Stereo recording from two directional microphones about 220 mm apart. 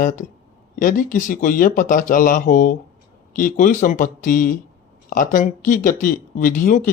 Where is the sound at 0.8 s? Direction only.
40° left (ahead or behind).